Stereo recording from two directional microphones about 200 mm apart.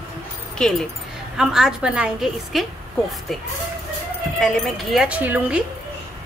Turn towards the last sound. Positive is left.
turn(degrees=-5)  # may be behind; listen again after turning